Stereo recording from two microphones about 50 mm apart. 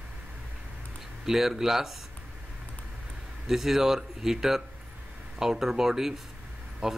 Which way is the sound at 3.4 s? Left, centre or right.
Centre.